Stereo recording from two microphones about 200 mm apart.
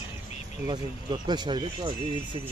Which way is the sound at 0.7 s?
20° right (ahead or behind).